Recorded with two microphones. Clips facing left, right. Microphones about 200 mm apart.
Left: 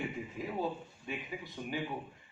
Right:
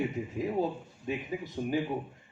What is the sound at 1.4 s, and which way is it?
Speech, 45° right (ahead or behind).